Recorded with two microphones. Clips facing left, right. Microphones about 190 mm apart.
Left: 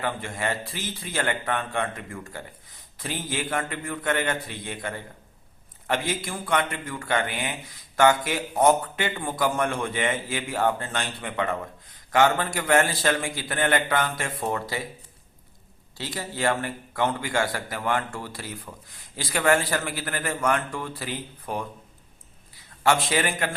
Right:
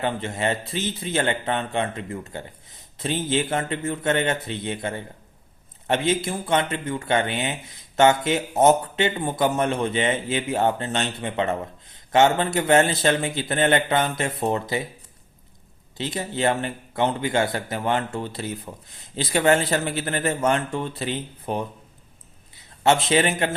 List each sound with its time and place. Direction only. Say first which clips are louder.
0.0 s speech: right 4 dB; 25° right (ahead or behind)
16.0 s a man's voice: right 4 dB; 20° right (ahead or behind)